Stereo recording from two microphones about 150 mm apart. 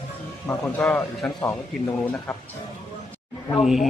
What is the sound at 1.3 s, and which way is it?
Speech, 20° left (ahead or behind).